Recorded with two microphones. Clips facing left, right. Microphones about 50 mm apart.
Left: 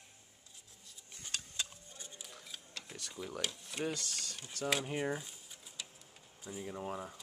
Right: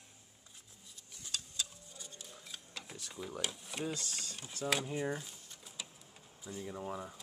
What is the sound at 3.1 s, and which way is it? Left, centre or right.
Speech, centre.